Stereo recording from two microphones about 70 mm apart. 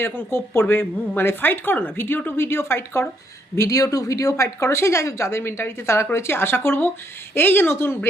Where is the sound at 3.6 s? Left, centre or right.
Left.